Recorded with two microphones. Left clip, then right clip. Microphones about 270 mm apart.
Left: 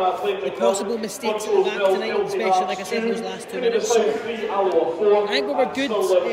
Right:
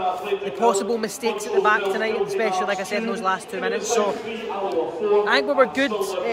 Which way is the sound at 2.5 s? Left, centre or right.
Centre.